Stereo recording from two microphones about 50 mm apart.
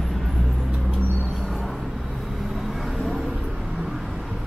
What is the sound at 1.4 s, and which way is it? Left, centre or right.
Vehicle, centre.